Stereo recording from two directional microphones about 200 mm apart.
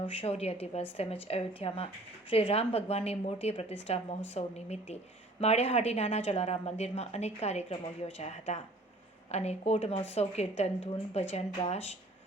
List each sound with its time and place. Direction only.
0.0 s speech: 25° left (ahead or behind)